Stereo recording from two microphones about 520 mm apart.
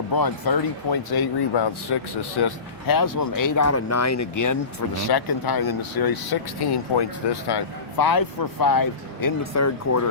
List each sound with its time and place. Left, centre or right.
0.1 s speech: left
5.0 s speech: left